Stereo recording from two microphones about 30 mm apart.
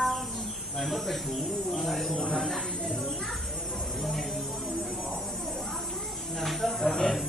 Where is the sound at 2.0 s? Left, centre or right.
Left.